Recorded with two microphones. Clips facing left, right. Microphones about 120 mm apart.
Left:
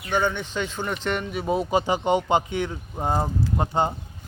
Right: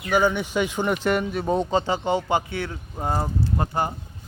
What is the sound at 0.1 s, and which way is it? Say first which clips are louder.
Speech: right 3 dB; 10° right (ahead or behind).